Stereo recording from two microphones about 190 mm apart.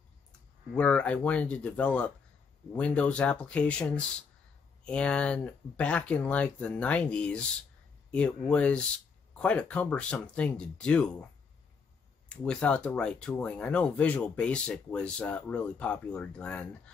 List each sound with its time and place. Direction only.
0.7 s speech: 5° left (ahead or behind)
12.3 s speech: 5° left (ahead or behind)